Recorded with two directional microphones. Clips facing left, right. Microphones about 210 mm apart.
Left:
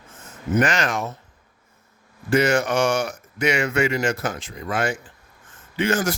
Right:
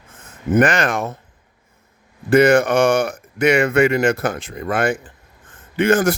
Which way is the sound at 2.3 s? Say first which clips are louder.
Right 6 dB; 55° right (ahead or behind).